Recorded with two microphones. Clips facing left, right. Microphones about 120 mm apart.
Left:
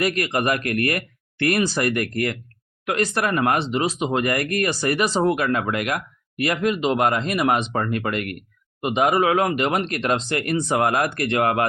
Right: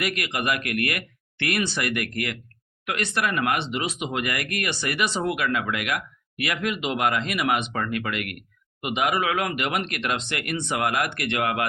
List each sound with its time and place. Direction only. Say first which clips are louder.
0.0 s speech: left 6 dB; 40° left (ahead or behind)